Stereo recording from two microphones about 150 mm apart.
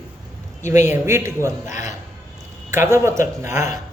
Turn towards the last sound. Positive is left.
turn(degrees=-20)  # may be behind; listen again after turning